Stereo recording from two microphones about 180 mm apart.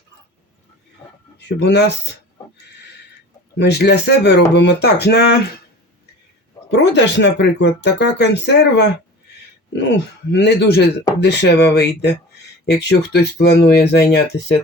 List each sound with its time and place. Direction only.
1.4 s speech: 65° left (ahead or behind)
3.6 s speech: 70° left (ahead or behind)
6.7 s speech: 75° left (ahead or behind)
10.3 s speech: 70° left (ahead or behind)